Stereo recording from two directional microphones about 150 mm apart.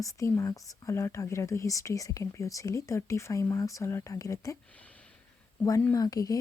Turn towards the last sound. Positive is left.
turn(degrees=25)  # may be behind; listen again after turning